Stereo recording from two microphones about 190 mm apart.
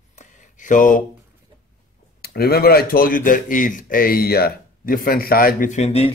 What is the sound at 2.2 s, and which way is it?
Speech, 55° left (ahead or behind).